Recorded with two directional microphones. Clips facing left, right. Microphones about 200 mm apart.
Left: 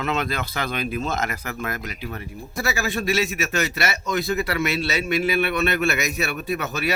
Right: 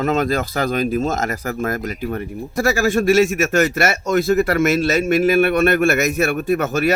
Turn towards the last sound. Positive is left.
turn(degrees=-45)  # may be behind; listen again after turning